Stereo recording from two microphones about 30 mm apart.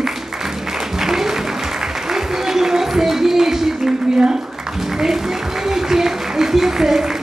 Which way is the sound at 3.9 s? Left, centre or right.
Centre.